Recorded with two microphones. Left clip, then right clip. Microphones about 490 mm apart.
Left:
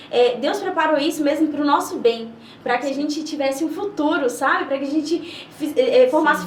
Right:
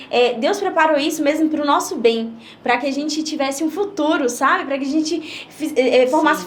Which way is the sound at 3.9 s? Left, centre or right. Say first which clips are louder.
Even; right.